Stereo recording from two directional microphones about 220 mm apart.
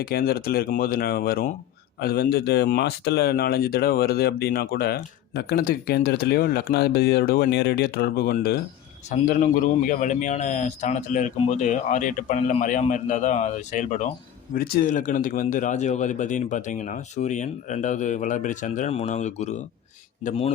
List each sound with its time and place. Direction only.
0.0 s a man's voice: 45° left (ahead or behind); by 20.5 s 25° left (ahead or behind)